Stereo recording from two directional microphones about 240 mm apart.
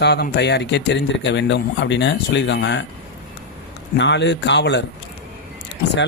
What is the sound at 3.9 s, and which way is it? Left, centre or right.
Speech, left.